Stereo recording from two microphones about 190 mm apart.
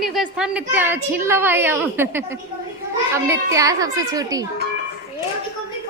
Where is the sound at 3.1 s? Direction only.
15° right (ahead or behind).